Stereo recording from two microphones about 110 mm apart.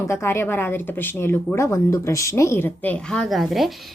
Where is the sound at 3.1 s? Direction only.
Centre (ahead or behind).